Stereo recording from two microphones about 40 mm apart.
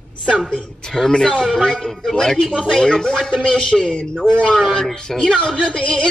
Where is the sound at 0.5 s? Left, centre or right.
Centre.